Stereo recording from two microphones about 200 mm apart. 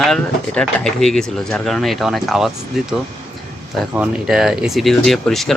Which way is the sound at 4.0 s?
5° right (ahead or behind).